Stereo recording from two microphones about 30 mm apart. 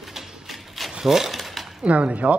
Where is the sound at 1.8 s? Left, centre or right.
Right.